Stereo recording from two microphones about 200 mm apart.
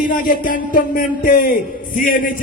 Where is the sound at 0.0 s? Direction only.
40° left (ahead or behind).